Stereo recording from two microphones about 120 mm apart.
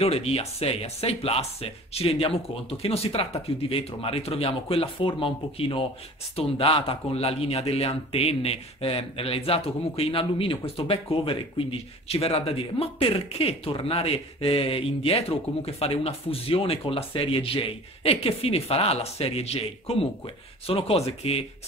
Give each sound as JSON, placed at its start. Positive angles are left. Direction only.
{"t": 0.0, "sound": "speech", "side_deg": 55}